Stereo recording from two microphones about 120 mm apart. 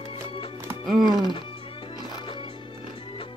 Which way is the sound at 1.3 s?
45° left (ahead or behind).